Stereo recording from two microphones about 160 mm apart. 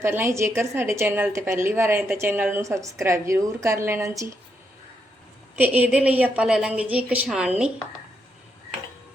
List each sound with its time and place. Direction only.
0.0 s a woman's voice: 15° right (ahead or behind)
5.5 s a woman's voice: 10° right (ahead or behind)